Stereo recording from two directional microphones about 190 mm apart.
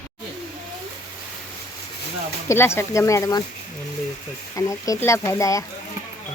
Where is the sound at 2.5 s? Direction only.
15° left (ahead or behind).